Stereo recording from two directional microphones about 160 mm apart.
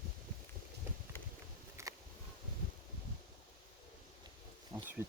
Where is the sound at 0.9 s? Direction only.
15° right (ahead or behind).